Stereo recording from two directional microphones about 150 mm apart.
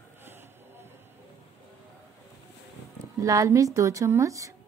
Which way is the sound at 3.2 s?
20° right (ahead or behind).